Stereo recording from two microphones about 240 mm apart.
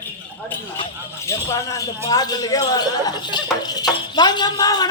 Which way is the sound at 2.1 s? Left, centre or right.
Centre.